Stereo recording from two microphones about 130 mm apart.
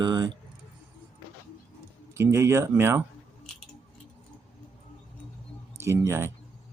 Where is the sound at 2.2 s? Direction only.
20° right (ahead or behind).